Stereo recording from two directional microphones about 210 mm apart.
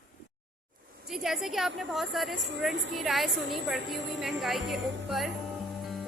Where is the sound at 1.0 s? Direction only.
Centre (ahead or behind).